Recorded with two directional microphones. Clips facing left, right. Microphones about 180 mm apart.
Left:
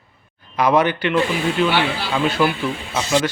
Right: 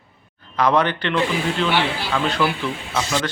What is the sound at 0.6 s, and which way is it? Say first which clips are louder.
A man's voice: left 2 dB; 10° left (ahead or behind).